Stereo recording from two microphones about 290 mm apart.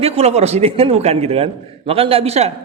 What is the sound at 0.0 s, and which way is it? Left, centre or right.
Speech, right.